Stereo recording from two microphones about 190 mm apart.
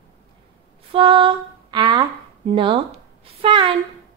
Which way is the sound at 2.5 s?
25° right (ahead or behind).